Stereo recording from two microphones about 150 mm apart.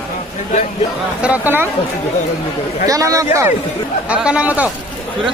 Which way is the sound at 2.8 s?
20° right (ahead or behind).